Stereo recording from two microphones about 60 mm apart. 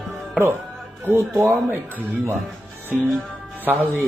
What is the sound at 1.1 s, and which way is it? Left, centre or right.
Speech, right.